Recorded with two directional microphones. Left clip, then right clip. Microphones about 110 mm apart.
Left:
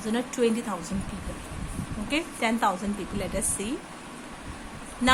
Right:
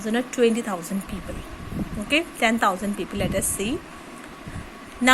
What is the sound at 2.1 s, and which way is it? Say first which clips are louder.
A woman's voice: right 6 dB; 35° right (ahead or behind).